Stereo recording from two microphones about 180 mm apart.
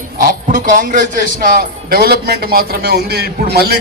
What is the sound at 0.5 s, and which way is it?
A man's voice, 50° right (ahead or behind).